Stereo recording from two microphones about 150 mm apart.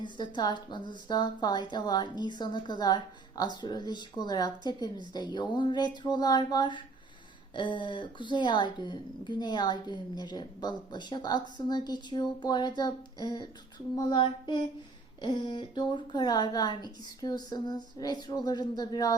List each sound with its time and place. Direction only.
0.0 s a woman's voice: 30° left (ahead or behind)
13.9 s child singing: 30° left (ahead or behind)
15.2 s a woman's voice: 30° left (ahead or behind)